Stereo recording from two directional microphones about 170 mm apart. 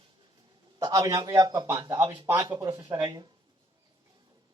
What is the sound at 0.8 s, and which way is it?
A man's voice, 20° right (ahead or behind).